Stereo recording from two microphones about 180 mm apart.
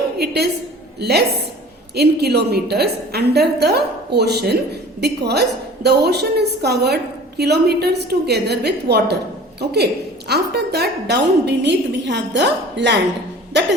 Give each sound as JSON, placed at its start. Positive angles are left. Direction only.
{"t": 0.2, "sound": "a woman's voice", "side_deg": -65}